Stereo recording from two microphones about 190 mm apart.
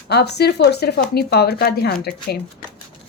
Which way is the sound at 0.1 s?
60° left (ahead or behind).